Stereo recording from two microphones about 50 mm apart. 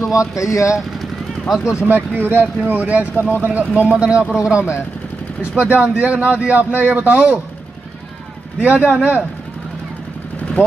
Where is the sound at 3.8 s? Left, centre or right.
Centre.